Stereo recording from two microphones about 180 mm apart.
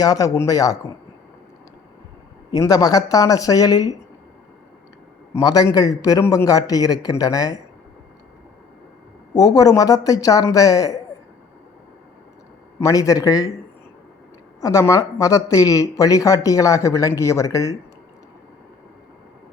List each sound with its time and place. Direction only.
0.0 s a man's voice: 20° left (ahead or behind)
2.5 s a man's voice: 20° left (ahead or behind)
5.3 s a man's voice: 20° left (ahead or behind)
9.3 s a man's voice: 20° left (ahead or behind)
12.8 s a man's voice: 20° left (ahead or behind)
14.6 s speech: 15° left (ahead or behind)